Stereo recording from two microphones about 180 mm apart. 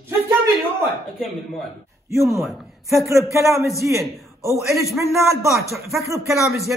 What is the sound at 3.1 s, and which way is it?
Speech, 15° right (ahead or behind).